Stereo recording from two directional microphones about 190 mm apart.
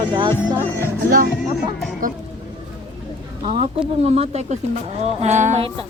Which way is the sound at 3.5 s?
30° right (ahead or behind).